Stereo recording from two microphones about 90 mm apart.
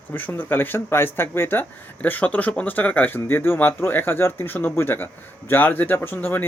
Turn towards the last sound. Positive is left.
turn(degrees=25)  # may be behind; listen again after turning